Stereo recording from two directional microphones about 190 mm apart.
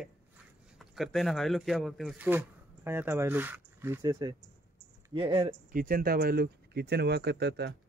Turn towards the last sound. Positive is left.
turn(degrees=-60)  # may be behind; listen again after turning